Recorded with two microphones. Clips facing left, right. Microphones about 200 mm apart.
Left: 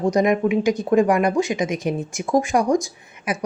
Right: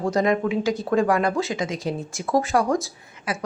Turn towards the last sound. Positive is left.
turn(degrees=15)  # may be behind; listen again after turning